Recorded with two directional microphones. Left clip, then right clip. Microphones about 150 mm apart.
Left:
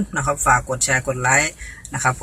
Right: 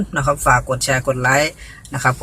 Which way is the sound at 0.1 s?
25° right (ahead or behind).